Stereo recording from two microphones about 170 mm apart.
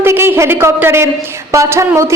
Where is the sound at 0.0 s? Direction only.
15° right (ahead or behind).